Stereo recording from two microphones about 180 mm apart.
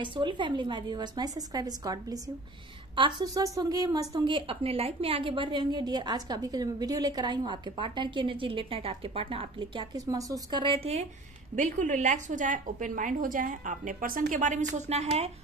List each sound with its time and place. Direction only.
0.0 s a woman's voice: 25° right (ahead or behind)